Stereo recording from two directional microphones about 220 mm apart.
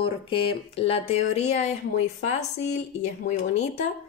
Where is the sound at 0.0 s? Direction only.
25° left (ahead or behind).